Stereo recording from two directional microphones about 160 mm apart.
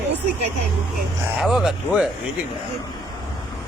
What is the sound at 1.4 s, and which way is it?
Speech, centre (ahead or behind).